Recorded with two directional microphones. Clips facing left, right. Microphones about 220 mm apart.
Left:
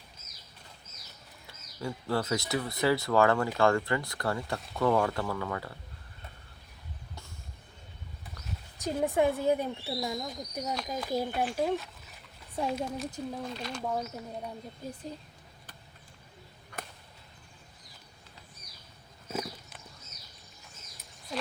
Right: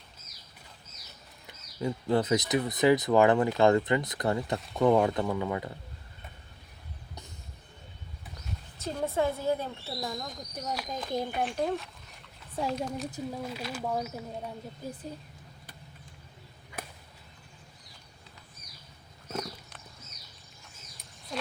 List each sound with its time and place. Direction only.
1.5 s speech: 20° right (ahead or behind)
8.8 s speech: 15° left (ahead or behind)
13.1 s speech: 5° right (ahead or behind)
19.3 s horse: 5° left (ahead or behind)